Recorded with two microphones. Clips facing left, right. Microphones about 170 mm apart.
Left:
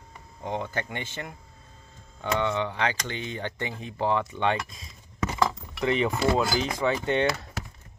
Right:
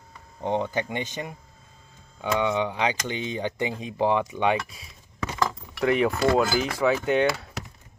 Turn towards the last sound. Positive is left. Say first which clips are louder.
# right 3 dB
turn(degrees=-5)  # may be behind; listen again after turning